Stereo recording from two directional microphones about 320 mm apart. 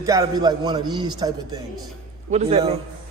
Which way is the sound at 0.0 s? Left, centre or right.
Centre.